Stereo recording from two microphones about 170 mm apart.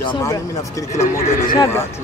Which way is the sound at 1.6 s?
15° left (ahead or behind).